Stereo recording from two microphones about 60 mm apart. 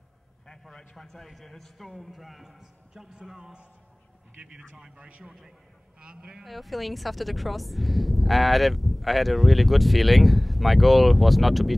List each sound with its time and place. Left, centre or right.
0.5 s speech: centre
4.4 s a man's voice: right
6.4 s speech: centre